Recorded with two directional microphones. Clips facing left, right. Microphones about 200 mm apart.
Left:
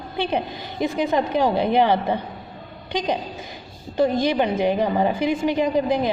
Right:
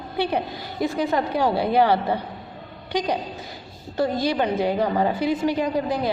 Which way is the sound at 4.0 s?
20° left (ahead or behind).